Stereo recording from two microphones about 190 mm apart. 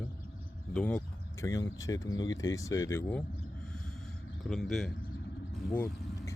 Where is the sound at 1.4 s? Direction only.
15° left (ahead or behind).